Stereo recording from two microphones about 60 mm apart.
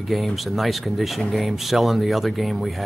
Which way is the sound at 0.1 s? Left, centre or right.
Centre.